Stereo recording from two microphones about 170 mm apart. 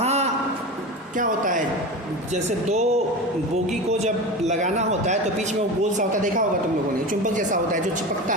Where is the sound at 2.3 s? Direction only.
40° right (ahead or behind).